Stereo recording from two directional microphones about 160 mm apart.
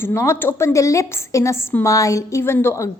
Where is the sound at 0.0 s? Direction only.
15° left (ahead or behind).